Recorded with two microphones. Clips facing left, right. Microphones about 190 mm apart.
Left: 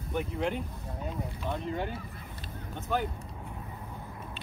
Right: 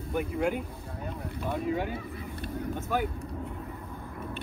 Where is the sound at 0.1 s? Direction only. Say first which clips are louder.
Right 3 dB; centre (ahead or behind).